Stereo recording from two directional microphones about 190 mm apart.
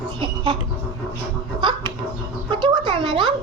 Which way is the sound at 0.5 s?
25° right (ahead or behind).